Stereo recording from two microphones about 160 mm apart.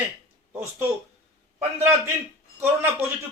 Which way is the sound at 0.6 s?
15° right (ahead or behind).